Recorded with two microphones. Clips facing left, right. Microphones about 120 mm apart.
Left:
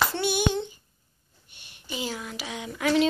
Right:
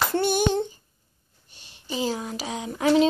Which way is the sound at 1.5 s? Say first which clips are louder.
Right 5 dB; 30° right (ahead or behind).